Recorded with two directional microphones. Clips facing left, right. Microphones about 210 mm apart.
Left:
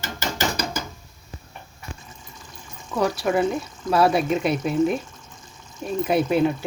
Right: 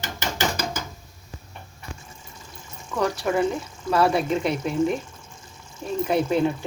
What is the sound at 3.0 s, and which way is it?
Speech, 10° left (ahead or behind).